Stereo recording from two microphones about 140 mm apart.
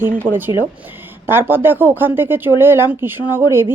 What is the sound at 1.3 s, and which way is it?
Speech, 15° right (ahead or behind).